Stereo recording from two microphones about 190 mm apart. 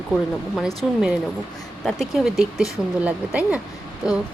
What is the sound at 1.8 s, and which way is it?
Speech, centre (ahead or behind).